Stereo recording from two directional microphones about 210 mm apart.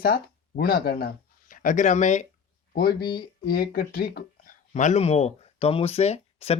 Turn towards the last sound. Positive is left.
turn(degrees=30)  # may be behind; listen again after turning